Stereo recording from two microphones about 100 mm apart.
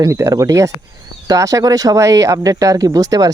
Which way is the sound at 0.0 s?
35° right (ahead or behind).